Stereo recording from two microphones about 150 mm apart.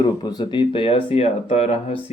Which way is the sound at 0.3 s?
30° left (ahead or behind).